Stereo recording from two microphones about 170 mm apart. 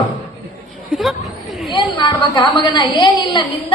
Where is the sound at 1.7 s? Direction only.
30° left (ahead or behind).